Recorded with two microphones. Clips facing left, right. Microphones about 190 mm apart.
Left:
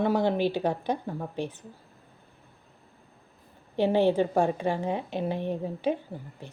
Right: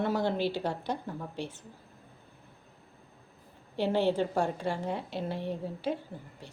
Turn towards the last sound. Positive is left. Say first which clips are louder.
# left 5 dB
turn(degrees=15)  # may be behind; listen again after turning